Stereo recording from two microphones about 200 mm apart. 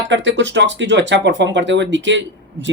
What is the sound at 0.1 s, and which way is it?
Speech, 65° right (ahead or behind).